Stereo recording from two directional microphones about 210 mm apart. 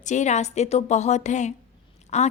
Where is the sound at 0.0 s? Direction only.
35° left (ahead or behind).